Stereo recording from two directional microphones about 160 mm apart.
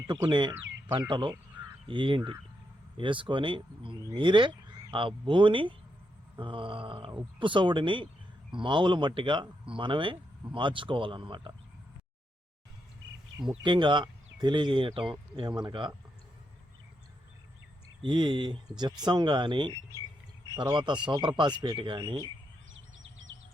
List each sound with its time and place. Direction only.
0.1 s speech: 30° right (ahead or behind)
13.6 s speech: 30° right (ahead or behind)
18.0 s speech: 30° right (ahead or behind)